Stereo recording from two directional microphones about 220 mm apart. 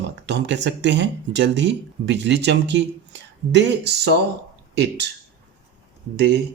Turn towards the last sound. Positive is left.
turn(degrees=-50)  # may be behind; listen again after turning